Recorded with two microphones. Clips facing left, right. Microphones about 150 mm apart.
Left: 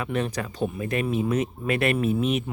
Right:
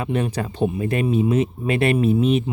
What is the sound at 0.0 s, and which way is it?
Speech, 30° right (ahead or behind).